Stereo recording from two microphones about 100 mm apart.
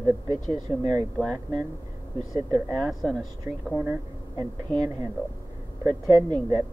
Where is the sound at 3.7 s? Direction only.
25° right (ahead or behind).